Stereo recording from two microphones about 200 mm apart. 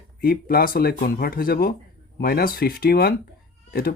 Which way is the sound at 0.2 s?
50° left (ahead or behind).